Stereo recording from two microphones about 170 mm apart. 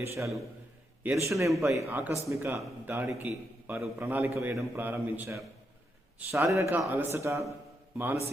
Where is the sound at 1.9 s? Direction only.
10° right (ahead or behind).